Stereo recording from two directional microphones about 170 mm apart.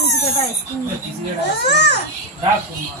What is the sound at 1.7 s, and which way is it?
Speech, 80° left.